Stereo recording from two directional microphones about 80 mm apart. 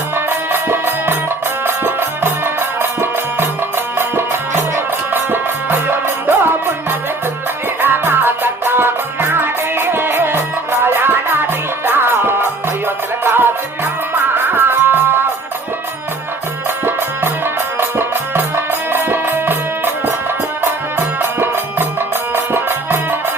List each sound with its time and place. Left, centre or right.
0.3 s music: right
7.8 s music: right
16.8 s music: right
21.2 s music: right